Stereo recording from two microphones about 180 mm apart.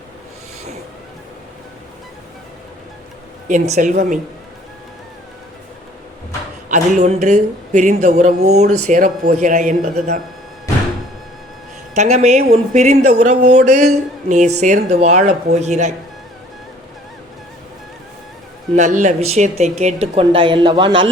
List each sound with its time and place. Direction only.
3.5 s speech: 45° right (ahead or behind)
6.7 s speech: 40° right (ahead or behind)
11.9 s speech: 40° right (ahead or behind)
18.8 s speech: 40° right (ahead or behind)